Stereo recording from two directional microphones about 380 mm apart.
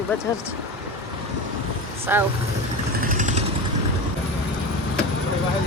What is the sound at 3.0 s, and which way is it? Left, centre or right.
Vehicle, right.